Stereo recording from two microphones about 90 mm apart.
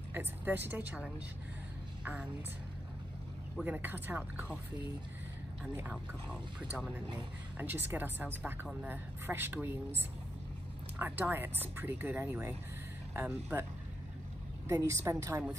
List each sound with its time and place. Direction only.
0.1 s speech: 20° right (ahead or behind)
3.6 s speech: 20° right (ahead or behind)
7.5 s speech: 20° right (ahead or behind)
11.0 s speech: 20° right (ahead or behind)
14.7 s a woman's voice: 35° right (ahead or behind)